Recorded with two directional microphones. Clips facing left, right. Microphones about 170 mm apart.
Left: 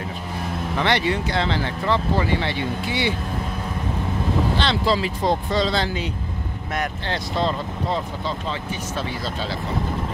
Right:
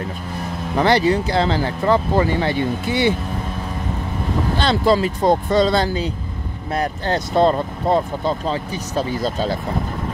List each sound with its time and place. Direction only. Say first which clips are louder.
0.7 s speech: right 6 dB; 35° right (ahead or behind)
4.6 s speech: right 5 dB; 45° right (ahead or behind)
6.7 s speech: right 6 dB; 35° right (ahead or behind)
7.3 s speech: right 8 dB; 50° right (ahead or behind)